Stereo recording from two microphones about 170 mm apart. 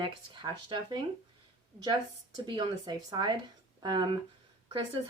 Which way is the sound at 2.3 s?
25° right (ahead or behind).